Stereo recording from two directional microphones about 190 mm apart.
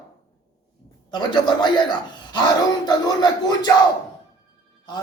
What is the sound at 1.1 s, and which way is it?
Speech, 25° left (ahead or behind).